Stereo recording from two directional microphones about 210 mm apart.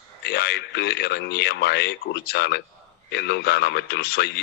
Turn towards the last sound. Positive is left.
turn(degrees=50)  # may be behind; listen again after turning